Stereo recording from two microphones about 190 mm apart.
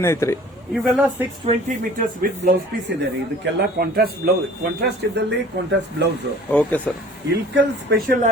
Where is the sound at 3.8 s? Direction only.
50° right (ahead or behind).